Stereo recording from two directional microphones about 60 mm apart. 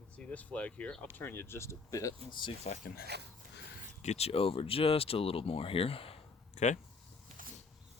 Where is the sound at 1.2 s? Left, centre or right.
Left.